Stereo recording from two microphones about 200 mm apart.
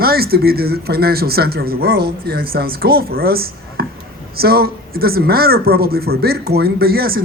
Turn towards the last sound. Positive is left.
turn(degrees=-50)  # may be behind; listen again after turning